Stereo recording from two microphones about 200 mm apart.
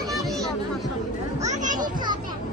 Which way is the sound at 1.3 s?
35° right (ahead or behind).